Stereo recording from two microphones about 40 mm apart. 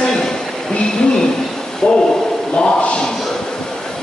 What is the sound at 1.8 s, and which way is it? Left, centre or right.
Speech, left.